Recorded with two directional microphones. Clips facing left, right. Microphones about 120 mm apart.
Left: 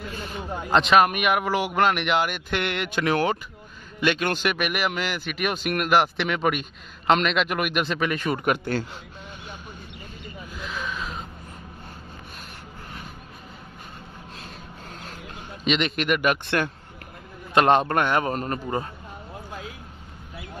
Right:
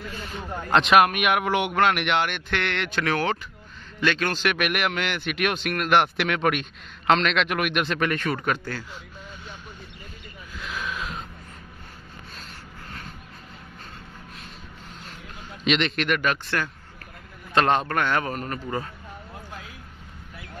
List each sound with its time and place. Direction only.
0.4 s a man's voice: 5° left (ahead or behind)
4.6 s a man's voice: centre (ahead or behind)
10.6 s a sound: centre (ahead or behind)
15.6 s a man's voice: 5° left (ahead or behind)
17.6 s a man's voice: 20° left (ahead or behind)